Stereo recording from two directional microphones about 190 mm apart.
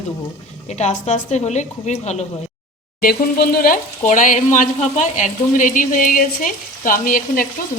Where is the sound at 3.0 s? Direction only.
50° left (ahead or behind).